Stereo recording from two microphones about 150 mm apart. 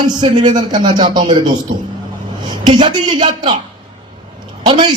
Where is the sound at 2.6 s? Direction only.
30° right (ahead or behind).